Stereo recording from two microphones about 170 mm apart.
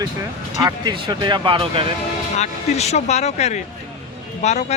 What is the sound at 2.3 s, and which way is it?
Speech, 40° left (ahead or behind).